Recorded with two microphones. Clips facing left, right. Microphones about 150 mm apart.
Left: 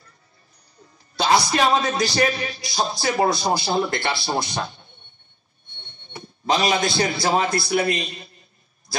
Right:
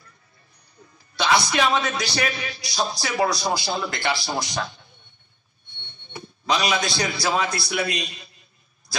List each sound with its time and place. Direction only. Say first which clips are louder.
1.2 s speech: left 2 dB; 35° left (ahead or behind)
3.7 s speech: left 3 dB; 25° left (ahead or behind)
6.1 s a sound: left 2 dB; 40° left (ahead or behind)
7.1 s a man's voice: left 3 dB; 45° left (ahead or behind)